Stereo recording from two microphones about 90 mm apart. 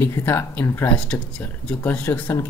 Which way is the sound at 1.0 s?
10° left (ahead or behind).